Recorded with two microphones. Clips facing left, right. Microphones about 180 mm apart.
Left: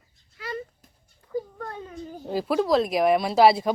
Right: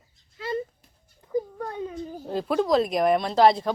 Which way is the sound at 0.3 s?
25° right (ahead or behind).